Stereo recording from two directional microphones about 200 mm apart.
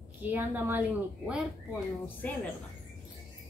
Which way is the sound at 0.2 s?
10° right (ahead or behind).